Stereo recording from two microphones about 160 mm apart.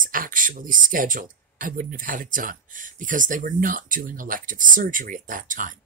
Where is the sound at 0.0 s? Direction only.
60° right (ahead or behind).